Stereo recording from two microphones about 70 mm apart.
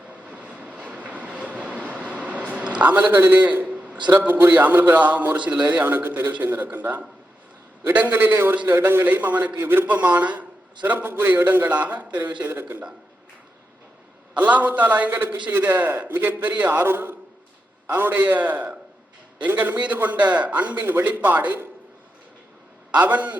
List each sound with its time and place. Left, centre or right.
0.1 s vehicle: centre
0.9 s train: centre
4.0 s a man's voice: right
14.3 s a man's voice: right
23.0 s a man's voice: right